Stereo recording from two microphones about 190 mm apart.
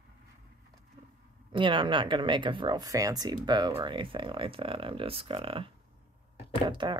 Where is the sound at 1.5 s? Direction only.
25° right (ahead or behind).